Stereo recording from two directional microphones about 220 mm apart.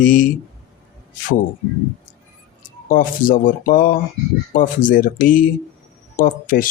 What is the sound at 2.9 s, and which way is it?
Speech, 40° left (ahead or behind).